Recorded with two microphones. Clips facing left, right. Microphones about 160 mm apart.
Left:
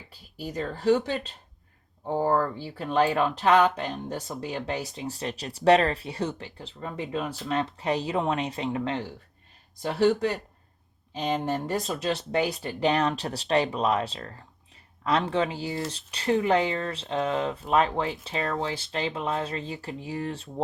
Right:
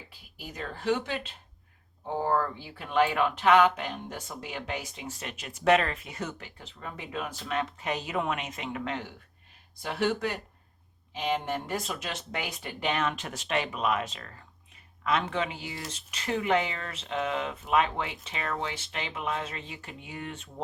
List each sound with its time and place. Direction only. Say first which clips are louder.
0.1 s speech: left 9 dB; 35° left (ahead or behind)